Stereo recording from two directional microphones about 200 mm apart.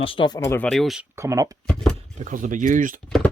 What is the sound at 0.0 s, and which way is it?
Speech, 25° left (ahead or behind).